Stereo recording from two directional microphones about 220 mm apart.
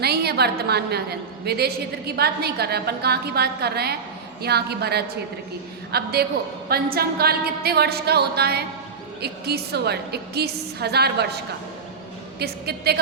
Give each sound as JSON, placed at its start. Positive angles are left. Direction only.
{"t": 0.0, "sound": "a woman's voice", "side_deg": -45}